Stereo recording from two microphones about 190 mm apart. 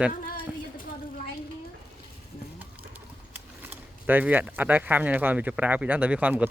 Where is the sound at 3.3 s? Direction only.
10° right (ahead or behind).